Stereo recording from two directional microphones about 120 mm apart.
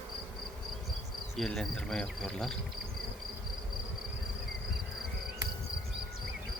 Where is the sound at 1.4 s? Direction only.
5° left (ahead or behind).